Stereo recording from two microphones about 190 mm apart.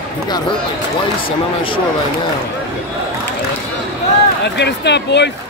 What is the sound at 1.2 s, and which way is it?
Speech, 25° left (ahead or behind).